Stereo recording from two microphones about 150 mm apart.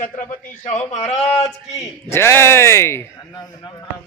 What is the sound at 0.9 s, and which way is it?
Speech, 45° left (ahead or behind).